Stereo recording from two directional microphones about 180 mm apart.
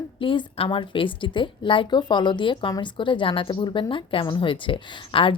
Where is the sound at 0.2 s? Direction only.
30° left (ahead or behind).